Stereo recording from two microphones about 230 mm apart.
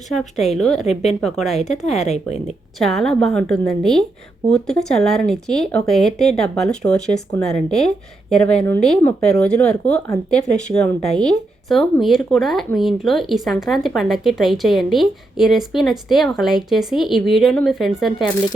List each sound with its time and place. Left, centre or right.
0.1 s speech: centre
1.8 s a woman's voice: left
2.7 s speech: centre